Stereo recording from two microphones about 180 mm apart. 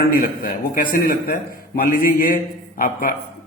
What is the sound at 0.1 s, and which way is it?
A man's voice, 50° left (ahead or behind).